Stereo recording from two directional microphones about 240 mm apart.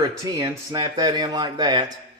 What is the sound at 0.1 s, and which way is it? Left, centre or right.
Speech, centre.